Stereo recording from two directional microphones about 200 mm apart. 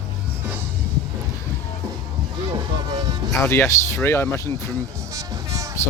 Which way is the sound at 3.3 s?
15° left (ahead or behind).